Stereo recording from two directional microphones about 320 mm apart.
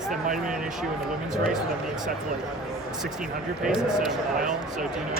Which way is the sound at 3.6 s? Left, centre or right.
Centre.